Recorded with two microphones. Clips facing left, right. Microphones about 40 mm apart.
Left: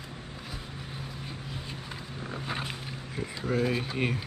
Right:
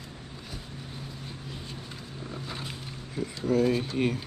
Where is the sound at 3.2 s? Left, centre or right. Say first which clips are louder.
Right 4 dB; centre.